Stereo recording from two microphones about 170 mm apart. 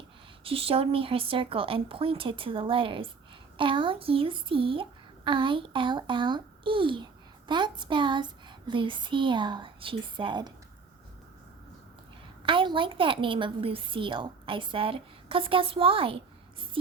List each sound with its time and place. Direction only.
0.4 s a woman's voice: 35° right (ahead or behind)
12.5 s a woman's voice: 30° right (ahead or behind)
16.8 s a sound: 30° right (ahead or behind)